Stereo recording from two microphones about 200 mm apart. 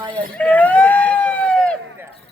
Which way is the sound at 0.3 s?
5° left (ahead or behind).